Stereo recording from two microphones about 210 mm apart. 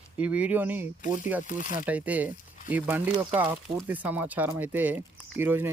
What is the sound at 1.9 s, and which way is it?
Speech, 5° right (ahead or behind).